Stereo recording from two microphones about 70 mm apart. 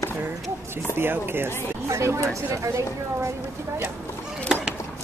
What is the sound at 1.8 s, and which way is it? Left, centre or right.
A woman's voice, right.